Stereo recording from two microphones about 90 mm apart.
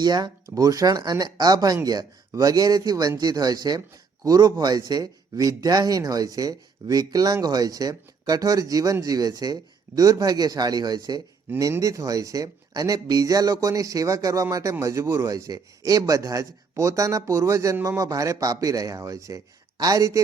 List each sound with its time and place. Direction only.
0.0 s a man's voice: 50° right (ahead or behind)
3.8 s a man's voice: 40° right (ahead or behind)
11.5 s speech: 35° right (ahead or behind)